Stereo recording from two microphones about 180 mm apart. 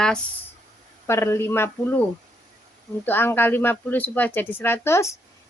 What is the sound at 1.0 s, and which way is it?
A woman's voice, 15° left (ahead or behind).